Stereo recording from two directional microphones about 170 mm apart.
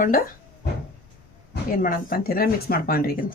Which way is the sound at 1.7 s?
55° left (ahead or behind).